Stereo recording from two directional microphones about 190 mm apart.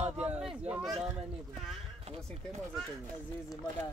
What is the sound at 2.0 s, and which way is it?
Speech, 35° right (ahead or behind).